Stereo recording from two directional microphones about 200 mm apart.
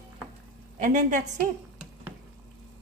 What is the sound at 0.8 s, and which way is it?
Speech, 40° right (ahead or behind).